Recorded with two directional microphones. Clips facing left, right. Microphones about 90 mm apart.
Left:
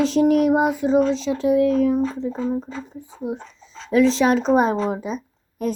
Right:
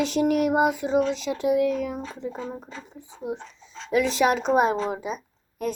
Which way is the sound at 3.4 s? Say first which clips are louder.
Left 2 dB; 40° left (ahead or behind).